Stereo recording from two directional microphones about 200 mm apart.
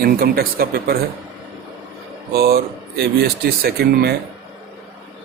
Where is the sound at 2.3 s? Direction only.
50° right (ahead or behind).